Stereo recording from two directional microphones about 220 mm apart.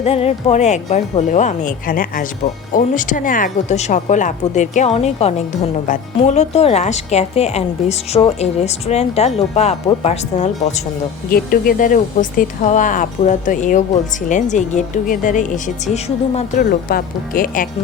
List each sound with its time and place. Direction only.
0.0 s speech: 30° left (ahead or behind)
11.3 s speech: 40° left (ahead or behind)